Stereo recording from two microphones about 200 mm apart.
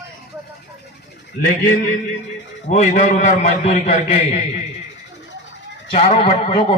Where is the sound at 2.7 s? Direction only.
35° left (ahead or behind).